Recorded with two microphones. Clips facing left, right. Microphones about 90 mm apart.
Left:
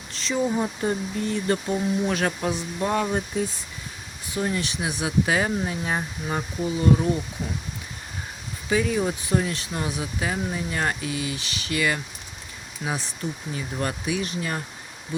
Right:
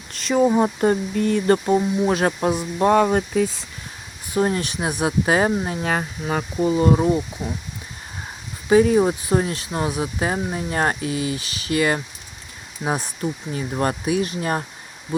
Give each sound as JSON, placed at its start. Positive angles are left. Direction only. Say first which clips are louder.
{"t": 0.1, "sound": "speech", "louder": "right 7 dB", "side_deg": -50}
{"t": 1.6, "sound": "speech", "louder": "right 6 dB", "side_deg": -35}
{"t": 4.4, "sound": "speech", "louder": "right 6 dB", "side_deg": -45}
{"t": 5.0, "sound": "speech", "louder": "right 4 dB", "side_deg": -35}
{"t": 5.8, "sound": "speech", "louder": "right 4 dB", "side_deg": -85}
{"t": 6.7, "sound": "speech", "louder": "right 4 dB", "side_deg": -40}
{"t": 8.7, "sound": "speech", "louder": "right 8 dB", "side_deg": -40}